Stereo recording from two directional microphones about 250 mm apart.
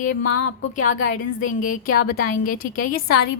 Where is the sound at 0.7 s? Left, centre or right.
Left.